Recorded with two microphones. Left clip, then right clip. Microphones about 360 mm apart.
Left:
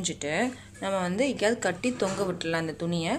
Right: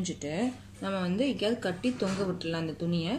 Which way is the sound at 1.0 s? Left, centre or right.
Centre.